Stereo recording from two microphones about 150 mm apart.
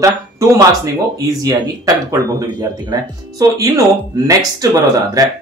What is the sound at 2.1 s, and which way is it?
Speech, 25° right (ahead or behind).